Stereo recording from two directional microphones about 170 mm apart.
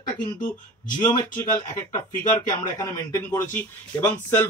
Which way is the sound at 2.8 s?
15° left (ahead or behind).